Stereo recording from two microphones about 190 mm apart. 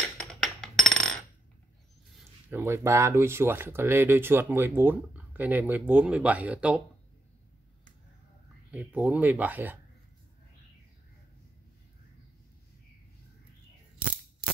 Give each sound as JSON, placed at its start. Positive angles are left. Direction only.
{"t": 0.2, "sound": "coin", "side_deg": 5}
{"t": 2.5, "sound": "speech", "side_deg": -15}
{"t": 8.7, "sound": "speech", "side_deg": -10}